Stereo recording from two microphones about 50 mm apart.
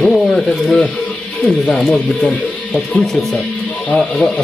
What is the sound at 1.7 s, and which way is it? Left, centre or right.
Speech, centre.